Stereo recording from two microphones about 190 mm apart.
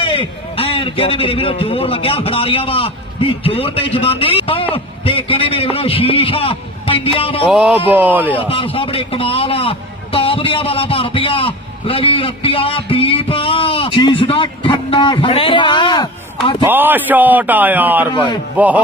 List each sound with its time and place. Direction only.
0.0 s a man's voice: 30° left (ahead or behind)
7.4 s a man's voice: 5° right (ahead or behind)
8.7 s a man's voice: 30° left (ahead or behind)
16.6 s a man's voice: 10° right (ahead or behind)